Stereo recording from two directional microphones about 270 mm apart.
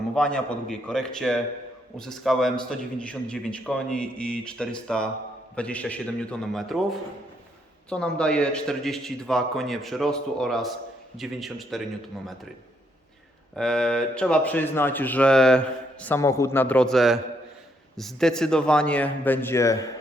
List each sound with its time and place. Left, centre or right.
0.1 s speech: centre
13.6 s speech: centre